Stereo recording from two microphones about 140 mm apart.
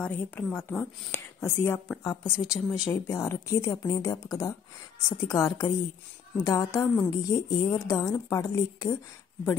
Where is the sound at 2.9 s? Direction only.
15° left (ahead or behind).